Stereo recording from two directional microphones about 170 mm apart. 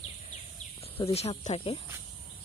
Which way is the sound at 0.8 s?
35° left (ahead or behind).